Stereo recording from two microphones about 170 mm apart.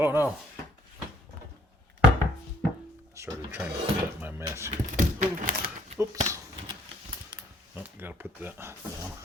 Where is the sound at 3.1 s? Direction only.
15° right (ahead or behind).